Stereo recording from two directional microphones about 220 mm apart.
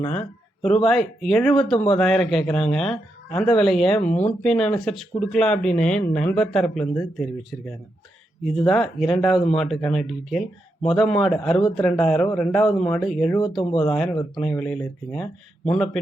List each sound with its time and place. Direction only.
0.0 s speech: 30° left (ahead or behind)
0.6 s speech: centre (ahead or behind)
13.6 s speech: 25° left (ahead or behind)
14.3 s speech: 5° left (ahead or behind)